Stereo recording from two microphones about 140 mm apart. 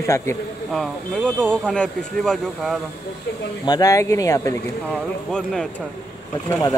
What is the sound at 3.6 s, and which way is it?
Speech, 25° left (ahead or behind).